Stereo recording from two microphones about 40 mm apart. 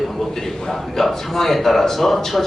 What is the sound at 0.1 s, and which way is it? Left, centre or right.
A man's voice, centre.